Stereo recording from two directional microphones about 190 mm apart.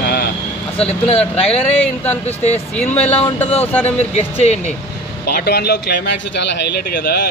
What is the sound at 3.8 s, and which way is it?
Speech, 35° left (ahead or behind).